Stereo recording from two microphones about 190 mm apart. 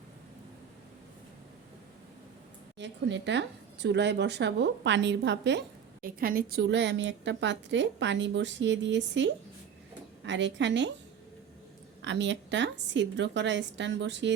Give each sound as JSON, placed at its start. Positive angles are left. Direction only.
{"t": 2.7, "sound": "a woman's voice", "side_deg": -65}
{"t": 6.0, "sound": "a woman's voice", "side_deg": -50}
{"t": 12.0, "sound": "a woman's voice", "side_deg": -70}